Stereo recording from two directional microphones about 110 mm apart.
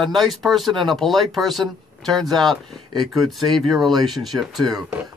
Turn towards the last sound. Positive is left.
turn(degrees=0)  # may be behind; listen again after turning